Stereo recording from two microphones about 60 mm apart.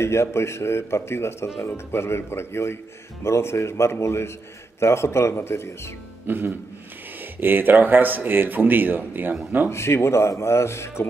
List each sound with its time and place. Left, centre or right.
0.0 s a man's voice: left
6.2 s music: right
7.3 s speech: right
9.7 s a man's voice: left